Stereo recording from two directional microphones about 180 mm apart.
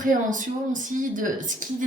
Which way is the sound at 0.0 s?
45° right (ahead or behind).